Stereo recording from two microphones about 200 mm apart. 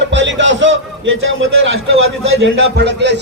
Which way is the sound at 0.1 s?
65° right (ahead or behind).